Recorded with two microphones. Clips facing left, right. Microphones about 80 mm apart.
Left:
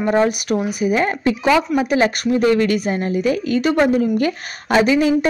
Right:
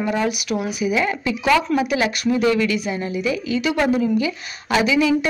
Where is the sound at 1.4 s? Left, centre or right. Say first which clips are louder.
Left 1 dB; centre.